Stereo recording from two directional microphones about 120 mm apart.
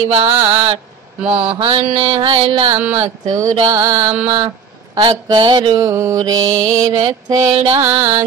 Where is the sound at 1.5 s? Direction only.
45° right (ahead or behind).